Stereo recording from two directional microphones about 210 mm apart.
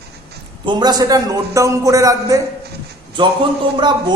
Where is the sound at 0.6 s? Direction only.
20° right (ahead or behind).